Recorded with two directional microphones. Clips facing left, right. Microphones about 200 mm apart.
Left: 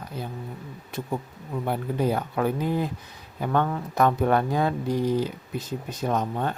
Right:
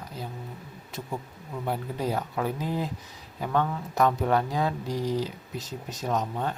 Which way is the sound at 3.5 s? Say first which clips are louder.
Left 2 dB; 55° left (ahead or behind).